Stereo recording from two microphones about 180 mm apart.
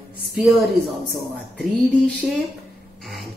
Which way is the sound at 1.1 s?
Centre (ahead or behind).